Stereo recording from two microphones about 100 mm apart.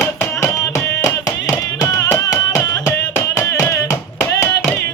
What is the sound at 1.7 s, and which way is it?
Music, 40° left (ahead or behind).